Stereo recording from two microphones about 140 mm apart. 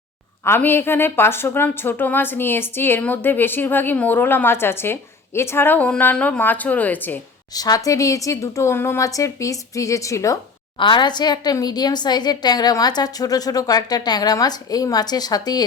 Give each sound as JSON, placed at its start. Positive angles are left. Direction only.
{"t": 0.4, "sound": "a woman's voice", "side_deg": 15}
{"t": 7.5, "sound": "a woman's voice", "side_deg": 25}
{"t": 10.8, "sound": "a woman's voice", "side_deg": 35}